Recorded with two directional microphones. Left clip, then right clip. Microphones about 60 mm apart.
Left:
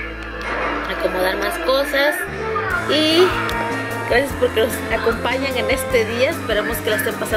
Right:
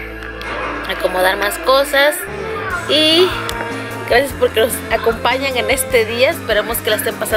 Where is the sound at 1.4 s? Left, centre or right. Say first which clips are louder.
Right 4 dB; centre.